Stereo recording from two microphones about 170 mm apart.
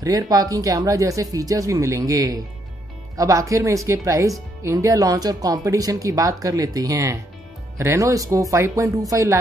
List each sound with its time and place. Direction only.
0.0 s speech: 20° right (ahead or behind)